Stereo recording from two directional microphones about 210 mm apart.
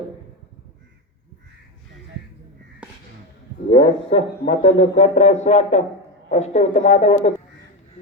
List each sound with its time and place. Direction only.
3.7 s a man's voice: 25° left (ahead or behind)